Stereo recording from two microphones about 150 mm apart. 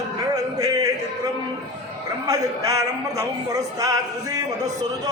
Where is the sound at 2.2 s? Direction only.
25° right (ahead or behind).